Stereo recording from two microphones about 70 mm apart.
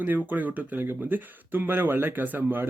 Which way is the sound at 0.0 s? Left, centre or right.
Right.